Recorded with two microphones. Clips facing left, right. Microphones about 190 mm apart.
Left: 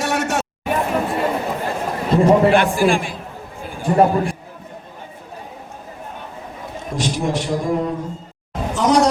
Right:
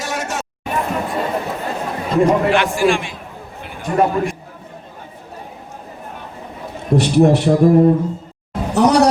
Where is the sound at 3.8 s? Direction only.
30° left (ahead or behind).